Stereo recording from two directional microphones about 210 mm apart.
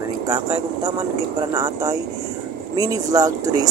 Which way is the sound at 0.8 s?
15° right (ahead or behind).